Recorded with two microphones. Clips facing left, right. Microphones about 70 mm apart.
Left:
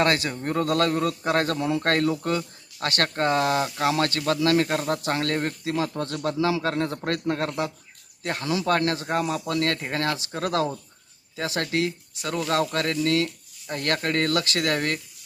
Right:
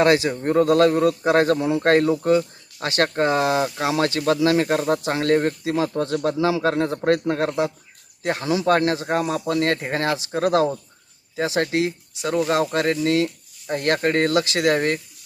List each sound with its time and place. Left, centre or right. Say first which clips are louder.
0.0 s speech: right 6 dB; centre